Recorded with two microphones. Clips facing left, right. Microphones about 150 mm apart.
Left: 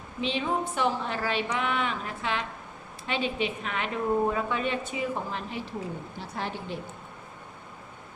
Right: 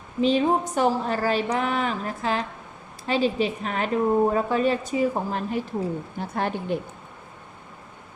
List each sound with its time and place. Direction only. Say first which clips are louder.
0.2 s a woman's voice: right 8 dB; 40° right (ahead or behind)